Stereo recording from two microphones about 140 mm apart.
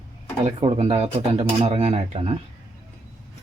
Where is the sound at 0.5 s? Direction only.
40° right (ahead or behind).